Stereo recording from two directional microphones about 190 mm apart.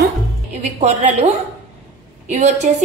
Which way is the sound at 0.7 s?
35° right (ahead or behind).